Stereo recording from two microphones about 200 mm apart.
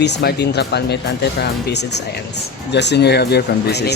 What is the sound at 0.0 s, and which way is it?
Speech, 55° left (ahead or behind).